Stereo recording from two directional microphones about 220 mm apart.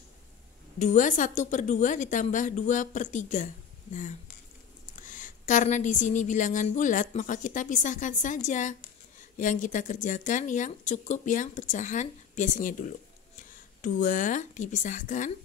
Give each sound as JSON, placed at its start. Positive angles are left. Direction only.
{"t": 0.7, "sound": "a woman's voice", "side_deg": 35}
{"t": 5.0, "sound": "a woman's voice", "side_deg": 35}